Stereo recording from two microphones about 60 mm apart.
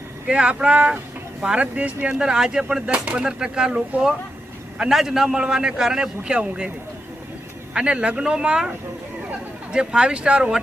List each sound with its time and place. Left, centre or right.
0.3 s a man's voice: centre
7.7 s a man's voice: centre
9.7 s a man's voice: centre